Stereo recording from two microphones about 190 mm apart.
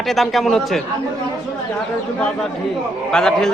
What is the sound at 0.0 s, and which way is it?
Speech, centre (ahead or behind).